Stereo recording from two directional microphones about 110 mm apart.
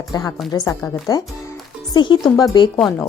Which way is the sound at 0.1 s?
30° left (ahead or behind).